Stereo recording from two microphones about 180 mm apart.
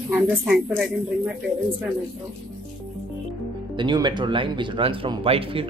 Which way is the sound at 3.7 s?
25° right (ahead or behind).